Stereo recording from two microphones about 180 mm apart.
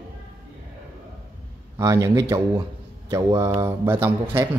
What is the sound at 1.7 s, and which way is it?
Speech, 15° right (ahead or behind).